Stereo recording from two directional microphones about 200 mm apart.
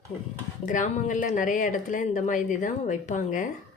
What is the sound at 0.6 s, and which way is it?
Speech, 40° left (ahead or behind).